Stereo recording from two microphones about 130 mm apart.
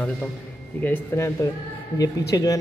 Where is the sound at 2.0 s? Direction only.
30° left (ahead or behind).